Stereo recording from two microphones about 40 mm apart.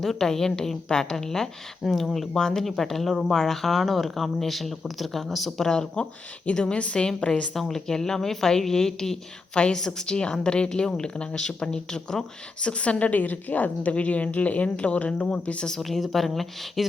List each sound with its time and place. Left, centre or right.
0.0 s a woman's voice: centre
5.6 s a woman's voice: centre
6.0 s a woman's voice: left
7.5 s a woman's voice: centre
12.6 s a woman's voice: left
15.8 s speech: centre